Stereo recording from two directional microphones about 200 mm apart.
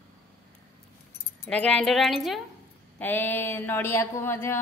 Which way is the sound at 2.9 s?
10° left (ahead or behind).